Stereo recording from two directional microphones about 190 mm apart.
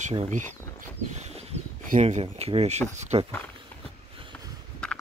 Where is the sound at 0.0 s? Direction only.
35° right (ahead or behind).